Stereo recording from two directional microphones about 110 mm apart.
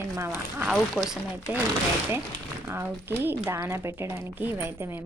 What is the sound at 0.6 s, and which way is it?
Speech, centre (ahead or behind).